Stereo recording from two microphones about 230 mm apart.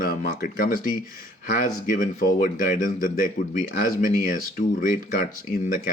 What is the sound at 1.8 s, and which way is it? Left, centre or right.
Speech, left.